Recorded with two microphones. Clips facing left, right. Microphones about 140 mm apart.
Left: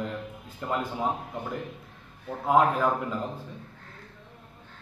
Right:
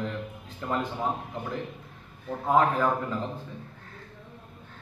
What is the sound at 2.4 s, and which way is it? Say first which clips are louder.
Speech: left 1 dB; 5° left (ahead or behind).